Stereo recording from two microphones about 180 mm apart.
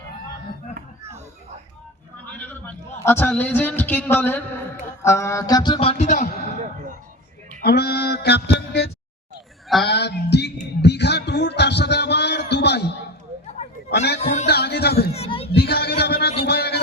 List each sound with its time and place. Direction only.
2.5 s a man's voice: 10° left (ahead or behind)
5.0 s music: 15° left (ahead or behind); by 6.2 s 40° left (ahead or behind)
7.6 s mantra: 60° left (ahead or behind)
9.8 s music: 70° left (ahead or behind)
13.5 s chatter: 40° left (ahead or behind)
14.2 s speech: 40° left (ahead or behind)
14.4 s speech: 65° left (ahead or behind)
15.1 s speech: 35° left (ahead or behind)
15.5 s a sound: 60° left (ahead or behind)